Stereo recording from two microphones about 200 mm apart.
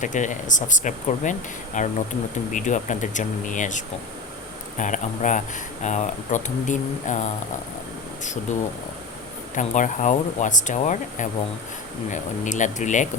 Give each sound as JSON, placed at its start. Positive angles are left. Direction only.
{"t": 0.0, "sound": "speech", "side_deg": 40}
{"t": 9.6, "sound": "speech", "side_deg": 40}